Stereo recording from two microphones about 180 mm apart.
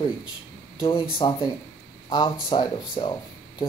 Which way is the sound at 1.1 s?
25° left (ahead or behind).